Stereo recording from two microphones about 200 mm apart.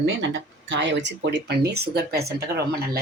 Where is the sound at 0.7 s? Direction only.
65° right (ahead or behind).